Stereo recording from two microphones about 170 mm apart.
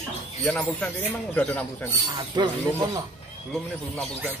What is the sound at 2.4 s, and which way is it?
Speech, 25° right (ahead or behind).